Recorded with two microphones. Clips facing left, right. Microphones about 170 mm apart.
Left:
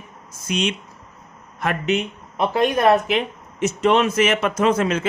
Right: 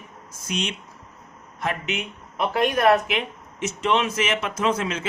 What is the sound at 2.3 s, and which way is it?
Speech, 25° left (ahead or behind).